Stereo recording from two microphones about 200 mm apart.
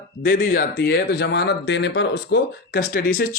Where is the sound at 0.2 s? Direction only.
45° left (ahead or behind).